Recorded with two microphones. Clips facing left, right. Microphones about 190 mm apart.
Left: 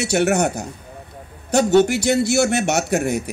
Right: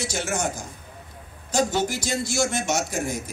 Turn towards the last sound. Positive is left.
turn(degrees=65)  # may be behind; listen again after turning